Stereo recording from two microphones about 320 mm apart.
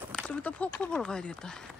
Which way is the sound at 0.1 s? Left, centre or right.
Centre.